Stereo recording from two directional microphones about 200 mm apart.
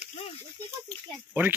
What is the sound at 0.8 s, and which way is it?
Oink, 10° right (ahead or behind).